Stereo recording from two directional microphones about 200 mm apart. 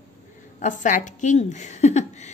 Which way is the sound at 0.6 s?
40° left (ahead or behind).